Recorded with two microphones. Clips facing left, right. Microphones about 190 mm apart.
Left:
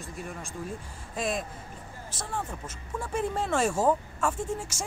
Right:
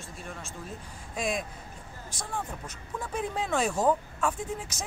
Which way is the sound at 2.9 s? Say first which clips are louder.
Left 2 dB; 5° left (ahead or behind).